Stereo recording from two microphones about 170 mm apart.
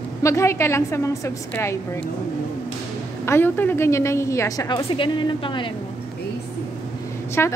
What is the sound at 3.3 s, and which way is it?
A woman's voice, 10° left (ahead or behind).